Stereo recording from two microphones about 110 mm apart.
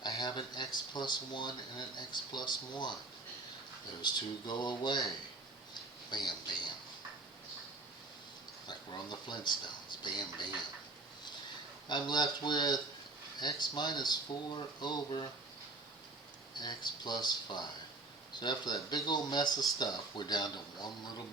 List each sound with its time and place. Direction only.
0.0 s speech: 40° left (ahead or behind)
4.0 s speech: 40° left (ahead or behind)
6.1 s speech: 40° left (ahead or behind)
8.6 s speech: 40° left (ahead or behind)
11.9 s speech: 40° left (ahead or behind)
16.6 s speech: 40° left (ahead or behind)